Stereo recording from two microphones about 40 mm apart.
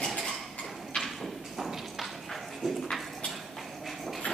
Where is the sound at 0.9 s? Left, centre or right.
Centre.